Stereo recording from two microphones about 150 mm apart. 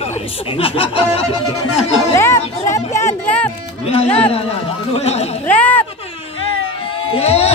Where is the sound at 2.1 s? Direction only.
20° left (ahead or behind).